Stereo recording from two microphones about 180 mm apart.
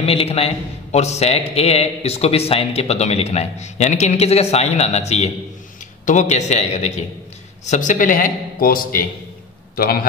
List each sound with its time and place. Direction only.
0.0 s a man's voice: 35° left (ahead or behind); by 9.9 s 55° left (ahead or behind)